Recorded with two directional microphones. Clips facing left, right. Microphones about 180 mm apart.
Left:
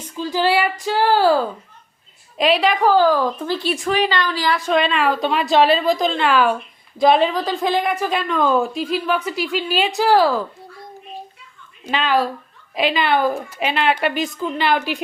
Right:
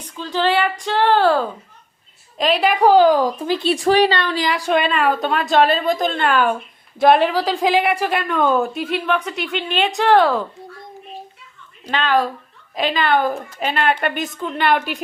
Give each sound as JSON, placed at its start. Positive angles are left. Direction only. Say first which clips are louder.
{"t": 0.2, "sound": "speech", "louder": "even", "side_deg": 10}
{"t": 2.4, "sound": "a woman's voice", "louder": "left 1 dB", "side_deg": 0}
{"t": 2.8, "sound": "speech", "louder": "right 5 dB", "side_deg": -20}
{"t": 3.7, "sound": "a woman's voice", "louder": "right 5 dB", "side_deg": -35}
{"t": 4.4, "sound": "speech", "louder": "left 1 dB", "side_deg": -15}
{"t": 4.7, "sound": "a woman's voice", "louder": "right 1 dB", "side_deg": -5}
{"t": 11.9, "sound": "a woman's voice", "louder": "even", "side_deg": 5}